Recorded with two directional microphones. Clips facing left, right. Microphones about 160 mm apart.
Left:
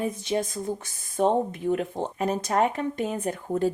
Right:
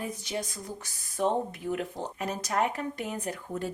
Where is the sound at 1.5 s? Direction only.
30° left (ahead or behind).